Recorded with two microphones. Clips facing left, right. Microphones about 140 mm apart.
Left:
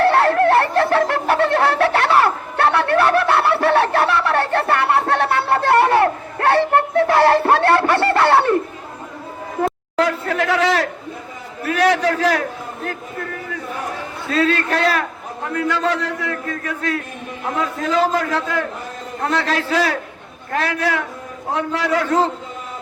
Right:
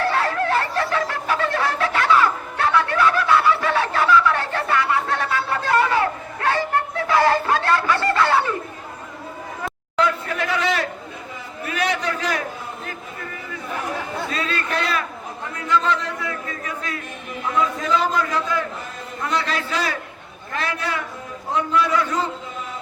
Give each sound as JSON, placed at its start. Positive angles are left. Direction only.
{"t": 0.0, "sound": "bird", "side_deg": 60}
{"t": 10.0, "sound": "speech", "side_deg": 80}
{"t": 11.6, "sound": "a man's voice", "side_deg": 75}
{"t": 14.3, "sound": "a man's voice", "side_deg": 70}
{"t": 21.5, "sound": "a man's voice", "side_deg": 75}
{"t": 22.0, "sound": "a man's voice", "side_deg": 65}